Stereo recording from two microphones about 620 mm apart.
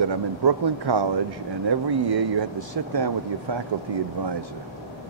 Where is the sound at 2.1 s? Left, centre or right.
Right.